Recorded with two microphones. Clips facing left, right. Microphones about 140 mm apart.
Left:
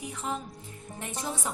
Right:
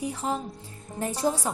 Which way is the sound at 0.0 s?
30° right (ahead or behind).